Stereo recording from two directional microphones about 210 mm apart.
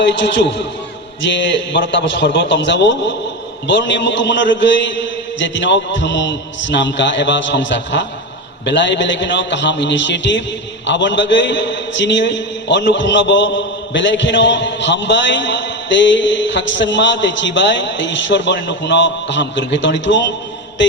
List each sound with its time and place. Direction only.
0.0 s a man's voice: 55° left (ahead or behind)